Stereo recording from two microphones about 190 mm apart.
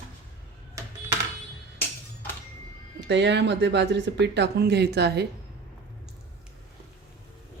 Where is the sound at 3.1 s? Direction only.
65° right (ahead or behind).